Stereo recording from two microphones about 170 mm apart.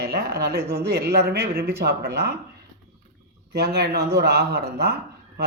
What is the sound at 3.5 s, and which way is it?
Speech, 75° right (ahead or behind).